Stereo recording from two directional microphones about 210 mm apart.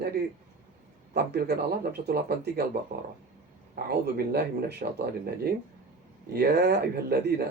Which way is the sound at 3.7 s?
50° right (ahead or behind).